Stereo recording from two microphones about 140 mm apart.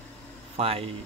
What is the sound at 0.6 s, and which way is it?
Speech, 45° right (ahead or behind).